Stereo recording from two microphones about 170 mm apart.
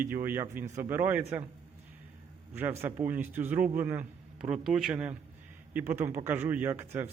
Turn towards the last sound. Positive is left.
turn(degrees=-15)  # may be behind; listen again after turning